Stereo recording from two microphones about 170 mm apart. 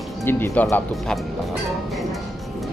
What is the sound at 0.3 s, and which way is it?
Speech, 10° left (ahead or behind).